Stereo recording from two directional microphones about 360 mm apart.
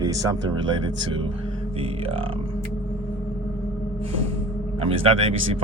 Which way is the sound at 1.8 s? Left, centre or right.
Centre.